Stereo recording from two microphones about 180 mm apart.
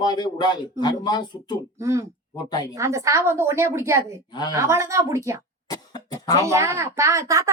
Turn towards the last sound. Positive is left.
turn(degrees=-15)  # may be behind; listen again after turning